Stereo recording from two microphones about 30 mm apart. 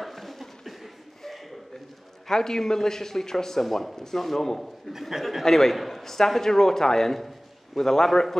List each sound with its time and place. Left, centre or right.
0.0 s a sound: centre
2.2 s a man's voice: centre
3.6 s a man's voice: centre
5.8 s speech: centre
6.0 s a man's voice: centre